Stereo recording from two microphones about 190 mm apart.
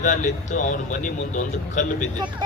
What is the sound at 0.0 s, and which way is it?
Speech, 40° left (ahead or behind).